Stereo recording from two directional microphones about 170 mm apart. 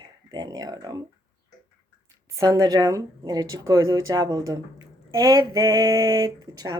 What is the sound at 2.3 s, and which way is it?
Speech, 20° right (ahead or behind).